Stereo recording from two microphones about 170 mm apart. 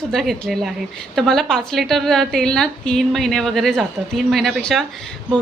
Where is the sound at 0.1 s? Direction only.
Centre (ahead or behind).